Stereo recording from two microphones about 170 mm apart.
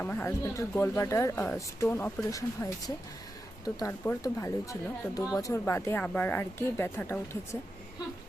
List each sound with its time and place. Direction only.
0.0 s speech: 10° left (ahead or behind)